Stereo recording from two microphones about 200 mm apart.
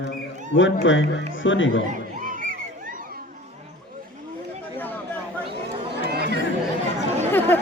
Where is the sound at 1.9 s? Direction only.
40° right (ahead or behind).